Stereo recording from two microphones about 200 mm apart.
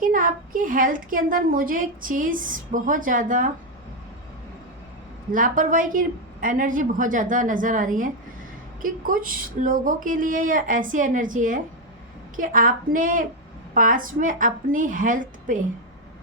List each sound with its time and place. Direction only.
0.0 s a woman's voice: 45° right (ahead or behind)
5.3 s a woman's voice: 40° right (ahead or behind)